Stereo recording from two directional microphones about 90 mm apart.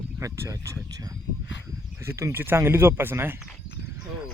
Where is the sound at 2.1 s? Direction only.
30° right (ahead or behind).